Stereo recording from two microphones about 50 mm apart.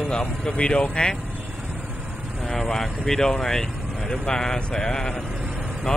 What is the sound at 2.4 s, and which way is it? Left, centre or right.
Speech, centre.